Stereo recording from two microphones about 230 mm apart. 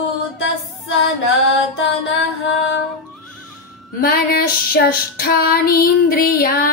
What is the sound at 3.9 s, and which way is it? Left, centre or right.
Female singing, left.